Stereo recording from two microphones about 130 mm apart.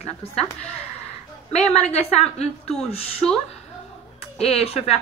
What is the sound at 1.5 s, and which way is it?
A woman's voice, 55° left (ahead or behind).